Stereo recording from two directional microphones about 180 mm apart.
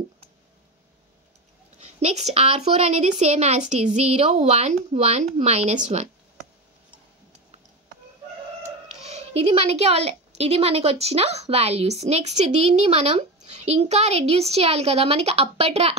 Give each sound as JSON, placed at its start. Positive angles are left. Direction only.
{"t": 1.8, "sound": "a woman's voice", "side_deg": -35}
{"t": 9.0, "sound": "a woman's voice", "side_deg": -35}